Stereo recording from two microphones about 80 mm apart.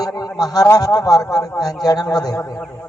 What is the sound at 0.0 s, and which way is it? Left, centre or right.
A man's voice, left.